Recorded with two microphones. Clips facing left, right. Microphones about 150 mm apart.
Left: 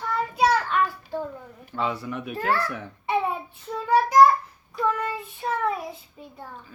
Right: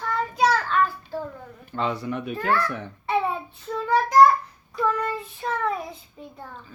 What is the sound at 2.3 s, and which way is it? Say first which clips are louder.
Speech: right 1 dB; 30° left (ahead or behind).